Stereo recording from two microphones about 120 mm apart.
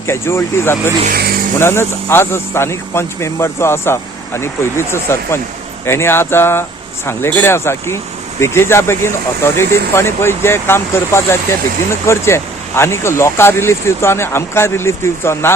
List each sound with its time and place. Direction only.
0.1 s speech: 20° left (ahead or behind)